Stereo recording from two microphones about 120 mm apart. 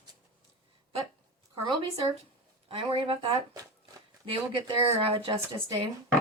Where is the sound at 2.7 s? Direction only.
45° right (ahead or behind).